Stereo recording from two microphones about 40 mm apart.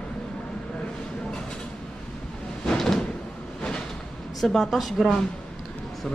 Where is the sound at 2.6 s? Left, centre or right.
Centre.